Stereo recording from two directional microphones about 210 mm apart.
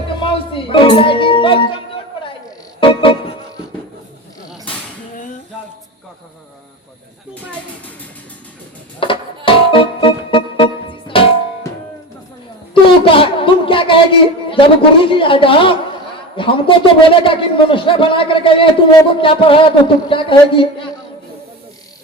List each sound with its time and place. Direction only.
0.2 s music: 25° left (ahead or behind)
2.8 s music: 25° left (ahead or behind)
9.0 s music: 25° left (ahead or behind)
13.1 s a sound: 25° left (ahead or behind)
16.4 s a man's voice: 25° left (ahead or behind)